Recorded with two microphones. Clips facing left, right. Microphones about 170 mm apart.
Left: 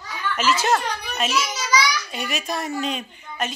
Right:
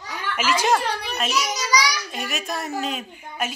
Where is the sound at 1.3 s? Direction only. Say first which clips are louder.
Even; 40° right (ahead or behind).